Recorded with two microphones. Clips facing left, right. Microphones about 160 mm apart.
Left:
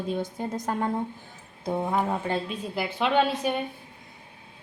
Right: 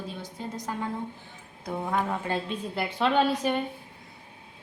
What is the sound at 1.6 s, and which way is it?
Speech, 20° left (ahead or behind).